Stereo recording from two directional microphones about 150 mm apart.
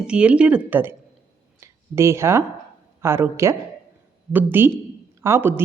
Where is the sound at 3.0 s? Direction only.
15° right (ahead or behind).